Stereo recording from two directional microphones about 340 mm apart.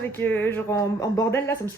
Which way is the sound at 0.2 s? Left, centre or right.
Centre.